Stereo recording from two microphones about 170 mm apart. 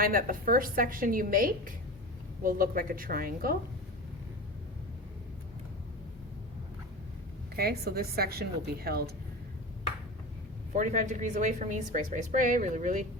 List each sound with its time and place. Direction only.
0.0 s a woman's voice: 55° right (ahead or behind)
7.5 s a woman's voice: 65° right (ahead or behind)
10.8 s a woman's voice: 45° right (ahead or behind)